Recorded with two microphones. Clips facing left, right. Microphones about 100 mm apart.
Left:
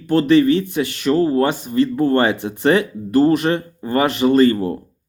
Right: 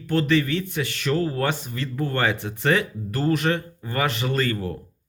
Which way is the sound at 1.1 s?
35° left (ahead or behind).